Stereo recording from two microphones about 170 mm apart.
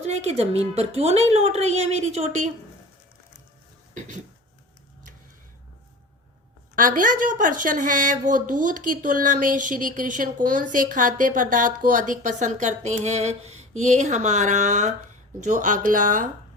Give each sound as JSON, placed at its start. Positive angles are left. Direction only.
{"t": 0.0, "sound": "a woman's voice", "side_deg": -40}
{"t": 6.7, "sound": "a woman's voice", "side_deg": -55}